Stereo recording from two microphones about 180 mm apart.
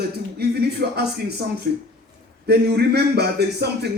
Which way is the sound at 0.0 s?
60° right (ahead or behind).